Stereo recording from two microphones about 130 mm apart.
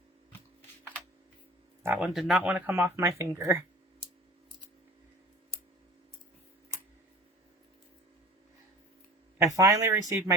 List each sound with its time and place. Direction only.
1.8 s speech: 10° right (ahead or behind)
2.1 s speech: centre (ahead or behind); by 3.6 s 20° right (ahead or behind)
9.4 s speech: 25° right (ahead or behind)